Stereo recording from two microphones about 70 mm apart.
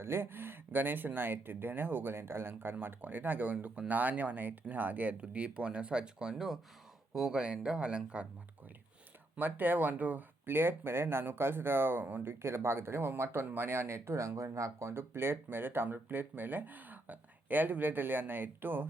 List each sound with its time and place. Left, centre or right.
0.0 s speech: right; by 8.3 s centre
9.3 s speech: right